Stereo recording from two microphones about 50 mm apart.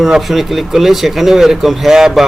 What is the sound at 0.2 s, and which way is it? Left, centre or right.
A man's voice, centre.